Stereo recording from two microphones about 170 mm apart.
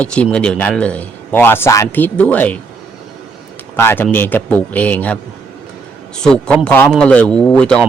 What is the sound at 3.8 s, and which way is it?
Speech, 15° left (ahead or behind).